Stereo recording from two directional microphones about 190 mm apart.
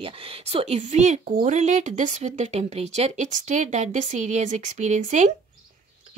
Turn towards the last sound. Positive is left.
turn(degrees=-40)  # may be behind; listen again after turning